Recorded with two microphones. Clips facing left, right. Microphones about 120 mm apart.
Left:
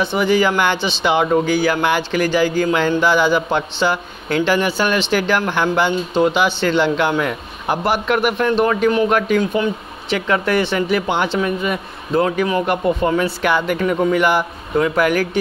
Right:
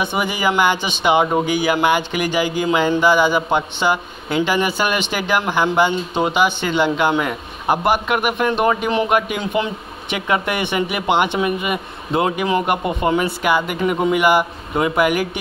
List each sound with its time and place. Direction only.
0.0 s speech: 15° right (ahead or behind)